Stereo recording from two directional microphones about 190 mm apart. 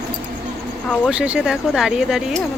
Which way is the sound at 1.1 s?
5° right (ahead or behind).